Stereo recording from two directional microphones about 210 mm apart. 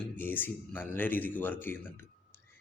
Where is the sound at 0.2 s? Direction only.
10° left (ahead or behind).